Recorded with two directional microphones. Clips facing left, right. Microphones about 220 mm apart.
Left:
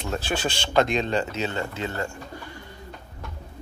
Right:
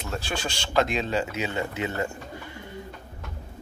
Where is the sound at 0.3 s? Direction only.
5° left (ahead or behind); by 2.6 s 20° right (ahead or behind).